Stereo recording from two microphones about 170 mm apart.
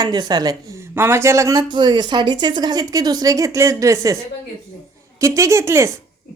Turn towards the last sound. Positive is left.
turn(degrees=-15)  # may be behind; listen again after turning